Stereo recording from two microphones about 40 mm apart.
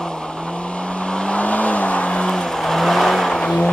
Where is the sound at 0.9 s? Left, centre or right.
Left.